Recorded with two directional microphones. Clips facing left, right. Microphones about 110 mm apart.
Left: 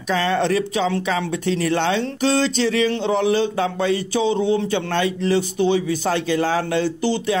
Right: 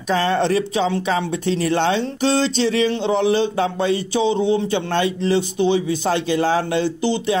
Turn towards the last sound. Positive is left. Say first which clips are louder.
# right 1 dB
turn(degrees=-25)  # may be behind; listen again after turning